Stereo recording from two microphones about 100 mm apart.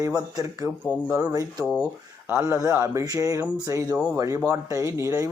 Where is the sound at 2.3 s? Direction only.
25° right (ahead or behind).